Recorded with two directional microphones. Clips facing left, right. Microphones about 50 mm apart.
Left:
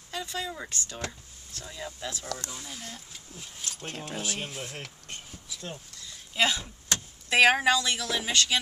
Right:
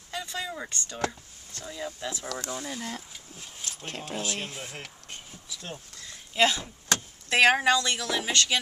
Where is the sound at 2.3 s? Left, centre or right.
Right.